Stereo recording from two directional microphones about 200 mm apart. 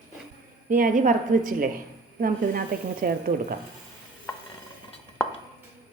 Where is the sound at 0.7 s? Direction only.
45° right (ahead or behind).